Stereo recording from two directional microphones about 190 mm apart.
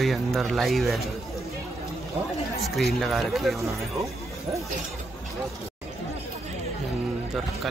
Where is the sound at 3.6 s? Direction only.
15° right (ahead or behind).